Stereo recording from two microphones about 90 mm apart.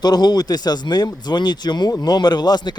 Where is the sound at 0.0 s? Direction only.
50° left (ahead or behind).